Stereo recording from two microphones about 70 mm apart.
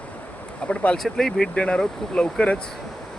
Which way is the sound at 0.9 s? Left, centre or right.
Centre.